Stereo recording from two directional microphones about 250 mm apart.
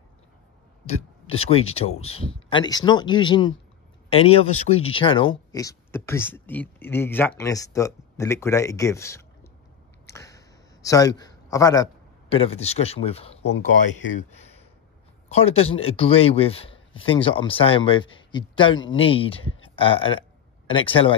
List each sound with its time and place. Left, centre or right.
0.8 s a sound: left
1.8 s speech: left
2.0 s a man's voice: left
4.5 s speech: left
4.9 s a man's voice: left
10.0 s a sound: centre
11.5 s a man's voice: centre
14.1 s a sound: left
15.2 s a man's voice: left